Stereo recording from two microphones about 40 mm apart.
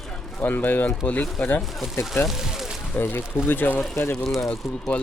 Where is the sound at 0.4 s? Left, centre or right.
Left.